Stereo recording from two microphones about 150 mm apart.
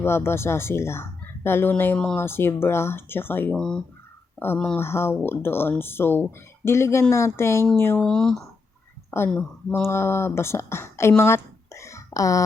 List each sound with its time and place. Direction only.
0.0 s speech: 15° left (ahead or behind)
9.0 s a woman's voice: 15° left (ahead or behind)
11.2 s a sound: 15° left (ahead or behind)